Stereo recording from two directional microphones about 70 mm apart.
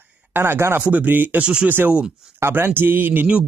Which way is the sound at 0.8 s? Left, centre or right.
Right.